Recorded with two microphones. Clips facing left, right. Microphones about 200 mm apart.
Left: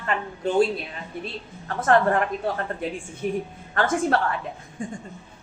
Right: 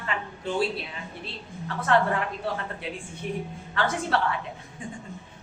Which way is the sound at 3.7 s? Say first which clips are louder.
Left 4 dB; 50° left (ahead or behind).